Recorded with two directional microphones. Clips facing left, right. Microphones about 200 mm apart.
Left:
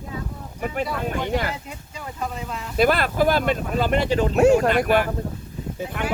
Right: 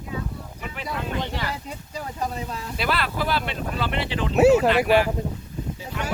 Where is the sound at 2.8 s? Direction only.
50° left (ahead or behind).